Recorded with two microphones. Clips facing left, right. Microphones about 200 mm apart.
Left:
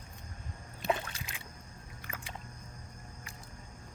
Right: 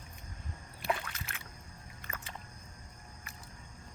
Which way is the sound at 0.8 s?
20° left (ahead or behind).